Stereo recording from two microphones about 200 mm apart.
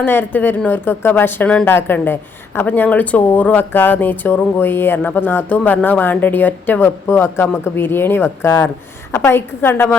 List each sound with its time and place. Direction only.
0.0 s speech: 10° left (ahead or behind)